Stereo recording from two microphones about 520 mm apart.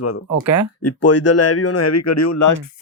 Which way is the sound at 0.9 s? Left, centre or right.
Left.